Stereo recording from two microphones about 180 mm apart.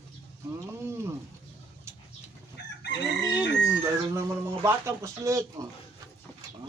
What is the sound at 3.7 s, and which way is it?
Speech, 15° right (ahead or behind).